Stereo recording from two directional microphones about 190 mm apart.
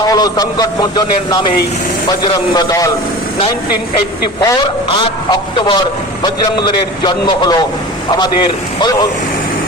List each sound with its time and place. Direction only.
0.0 s a man's voice: 20° left (ahead or behind)
2.2 s a man's voice: 20° left (ahead or behind)
4.4 s a man's voice: 25° left (ahead or behind)